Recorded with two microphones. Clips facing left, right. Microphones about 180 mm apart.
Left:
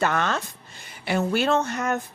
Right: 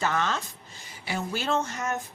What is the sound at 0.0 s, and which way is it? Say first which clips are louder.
Speech: left 4 dB; 60° left (ahead or behind).